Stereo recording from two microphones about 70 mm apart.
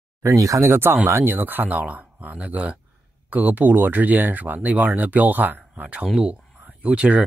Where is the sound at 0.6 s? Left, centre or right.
Right.